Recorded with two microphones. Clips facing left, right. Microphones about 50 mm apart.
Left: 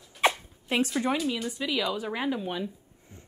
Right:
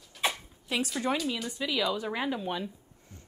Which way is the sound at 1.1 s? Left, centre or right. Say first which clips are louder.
Left 2 dB; centre.